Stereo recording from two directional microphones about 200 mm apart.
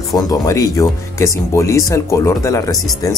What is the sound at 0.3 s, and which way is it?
Speech, 15° left (ahead or behind).